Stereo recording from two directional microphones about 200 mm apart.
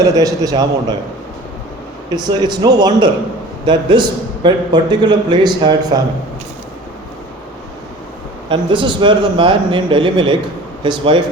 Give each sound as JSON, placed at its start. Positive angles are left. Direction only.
{"t": 0.0, "sound": "a man's voice", "side_deg": -15}
{"t": 2.0, "sound": "a man's voice", "side_deg": -20}
{"t": 8.4, "sound": "a man's voice", "side_deg": -25}